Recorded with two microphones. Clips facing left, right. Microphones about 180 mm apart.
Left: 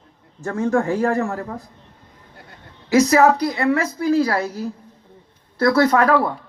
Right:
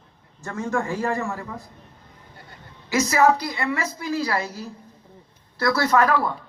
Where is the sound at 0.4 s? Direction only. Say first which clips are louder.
Left 7 dB; 60° left (ahead or behind).